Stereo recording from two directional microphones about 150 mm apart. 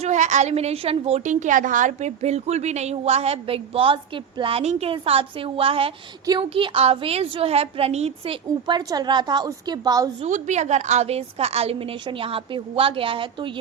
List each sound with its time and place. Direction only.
0.0 s a woman's voice: 55° right (ahead or behind)
8.4 s a woman's voice: 25° right (ahead or behind)
10.2 s a woman's voice: 55° right (ahead or behind); by 13.5 s 35° right (ahead or behind)